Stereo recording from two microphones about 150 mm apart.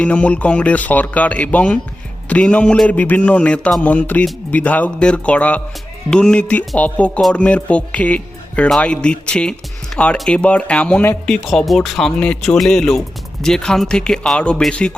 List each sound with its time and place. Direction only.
0.0 s music: 10° left (ahead or behind)
11.3 s speech: centre (ahead or behind)